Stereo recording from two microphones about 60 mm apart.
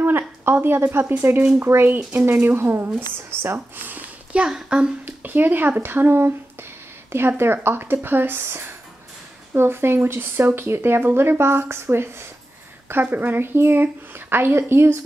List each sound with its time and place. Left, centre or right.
0.0 s a woman's voice: right
4.3 s a woman's voice: centre
5.0 s speech: right
13.0 s speech: right